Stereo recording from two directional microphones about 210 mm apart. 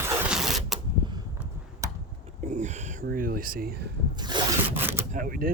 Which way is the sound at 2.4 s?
35° right (ahead or behind).